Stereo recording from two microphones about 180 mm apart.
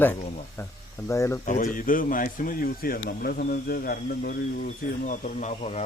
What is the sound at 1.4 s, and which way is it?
Speech, 45° left (ahead or behind).